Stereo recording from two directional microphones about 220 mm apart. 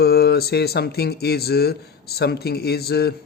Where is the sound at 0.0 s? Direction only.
45° left (ahead or behind).